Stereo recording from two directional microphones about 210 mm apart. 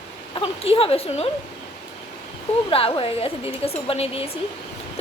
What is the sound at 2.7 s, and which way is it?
A woman's voice, 25° left (ahead or behind).